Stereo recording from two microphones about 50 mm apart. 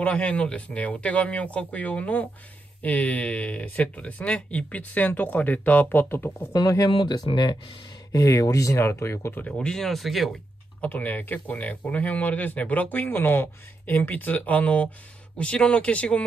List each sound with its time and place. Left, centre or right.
0.0 s speech: left
8.2 s speech: left
9.5 s speech: centre
10.8 s speech: left